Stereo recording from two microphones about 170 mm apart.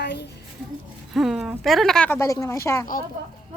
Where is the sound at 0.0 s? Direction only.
80° left.